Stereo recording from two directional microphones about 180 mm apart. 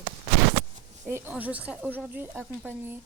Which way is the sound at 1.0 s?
10° right (ahead or behind).